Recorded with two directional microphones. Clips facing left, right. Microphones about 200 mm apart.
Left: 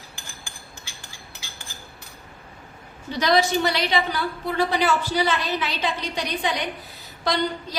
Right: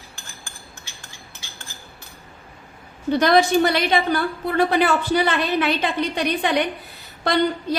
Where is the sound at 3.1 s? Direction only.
55° right (ahead or behind).